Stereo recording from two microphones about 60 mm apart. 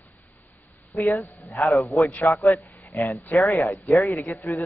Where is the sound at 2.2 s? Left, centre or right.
Left.